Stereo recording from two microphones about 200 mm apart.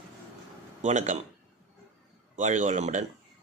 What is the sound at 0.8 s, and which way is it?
Speech, 35° right (ahead or behind).